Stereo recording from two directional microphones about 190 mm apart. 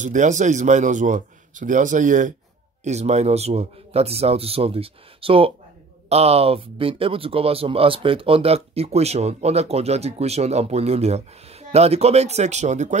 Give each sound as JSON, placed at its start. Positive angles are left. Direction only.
{"t": 0.0, "sound": "speech", "side_deg": -40}